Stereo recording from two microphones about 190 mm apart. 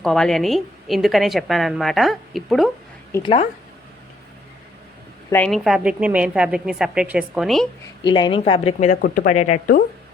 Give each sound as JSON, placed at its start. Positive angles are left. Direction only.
{"t": 0.0, "sound": "a woman's voice", "side_deg": 5}
{"t": 3.1, "sound": "a woman's voice", "side_deg": 15}
{"t": 5.3, "sound": "a woman's voice", "side_deg": 5}
{"t": 8.0, "sound": "speech", "side_deg": 25}
{"t": 9.0, "sound": "speech", "side_deg": 50}